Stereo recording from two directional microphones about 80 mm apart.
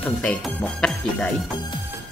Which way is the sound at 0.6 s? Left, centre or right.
Centre.